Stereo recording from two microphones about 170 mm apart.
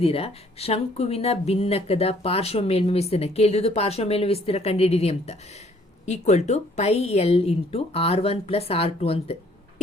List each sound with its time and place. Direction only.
0.0 s speech: 35° left (ahead or behind)